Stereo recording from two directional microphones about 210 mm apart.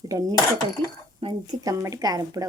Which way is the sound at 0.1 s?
15° right (ahead or behind).